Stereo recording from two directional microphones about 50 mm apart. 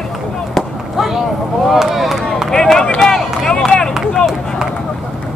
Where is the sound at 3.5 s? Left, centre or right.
Centre.